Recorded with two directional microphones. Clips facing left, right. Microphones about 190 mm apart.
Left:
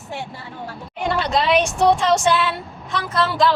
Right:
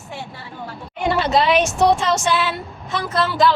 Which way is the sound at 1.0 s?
5° right (ahead or behind).